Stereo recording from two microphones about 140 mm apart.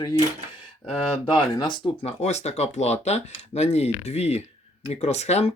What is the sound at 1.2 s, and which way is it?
Speech, 35° left (ahead or behind).